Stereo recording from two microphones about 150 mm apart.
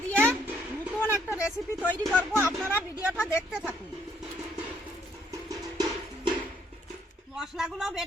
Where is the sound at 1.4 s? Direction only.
5° right (ahead or behind).